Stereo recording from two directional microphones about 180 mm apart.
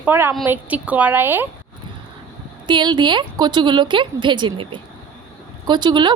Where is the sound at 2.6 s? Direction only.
25° right (ahead or behind).